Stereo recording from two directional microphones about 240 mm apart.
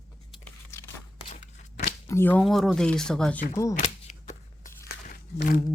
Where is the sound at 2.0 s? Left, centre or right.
Centre.